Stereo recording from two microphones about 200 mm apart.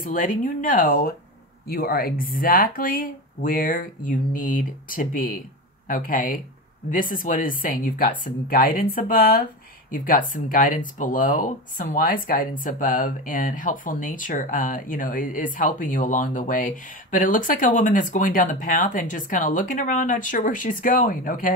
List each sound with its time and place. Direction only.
0.0 s speech: 45° left (ahead or behind)